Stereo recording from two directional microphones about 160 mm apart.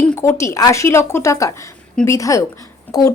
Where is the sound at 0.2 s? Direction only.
20° left (ahead or behind).